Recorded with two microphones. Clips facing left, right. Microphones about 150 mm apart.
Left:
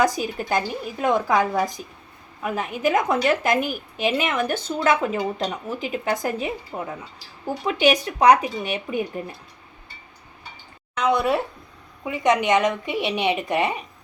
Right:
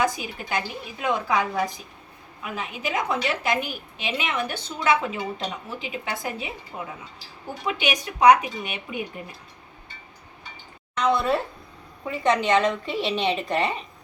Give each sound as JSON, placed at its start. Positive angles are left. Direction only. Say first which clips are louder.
{"t": 0.0, "sound": "a woman's voice", "louder": "left 4 dB", "side_deg": 40}
{"t": 7.6, "sound": "speech", "louder": "left 7 dB", "side_deg": 35}
{"t": 11.0, "sound": "a woman's voice", "louder": "left 2 dB", "side_deg": 15}